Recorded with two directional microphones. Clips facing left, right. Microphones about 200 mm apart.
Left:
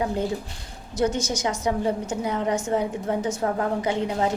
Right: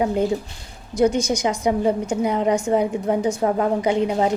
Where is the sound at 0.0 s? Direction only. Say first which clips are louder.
Right 5 dB; 15° right (ahead or behind).